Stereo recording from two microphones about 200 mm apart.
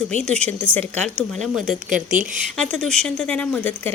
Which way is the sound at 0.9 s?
35° right (ahead or behind).